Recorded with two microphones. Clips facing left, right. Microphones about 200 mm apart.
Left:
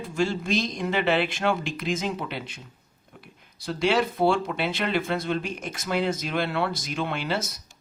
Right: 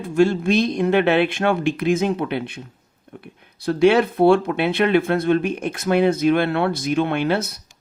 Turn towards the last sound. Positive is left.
turn(degrees=-60)  # may be behind; listen again after turning